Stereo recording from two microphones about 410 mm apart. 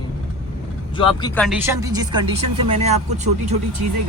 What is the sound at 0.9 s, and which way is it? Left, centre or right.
Speech, centre.